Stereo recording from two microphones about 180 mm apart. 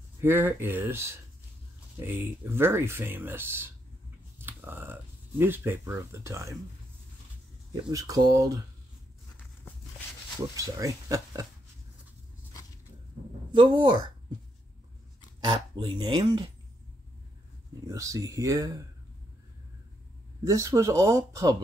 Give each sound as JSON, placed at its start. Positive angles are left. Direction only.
{"t": 0.2, "sound": "speech", "side_deg": -10}
{"t": 4.4, "sound": "a sound", "side_deg": -10}
{"t": 5.4, "sound": "speech", "side_deg": -10}
{"t": 7.7, "sound": "speech", "side_deg": -20}
{"t": 10.5, "sound": "speech", "side_deg": -20}
{"t": 13.5, "sound": "speech", "side_deg": -25}
{"t": 15.4, "sound": "speech", "side_deg": -25}
{"t": 17.8, "sound": "speech", "side_deg": -15}
{"t": 20.4, "sound": "speech", "side_deg": -15}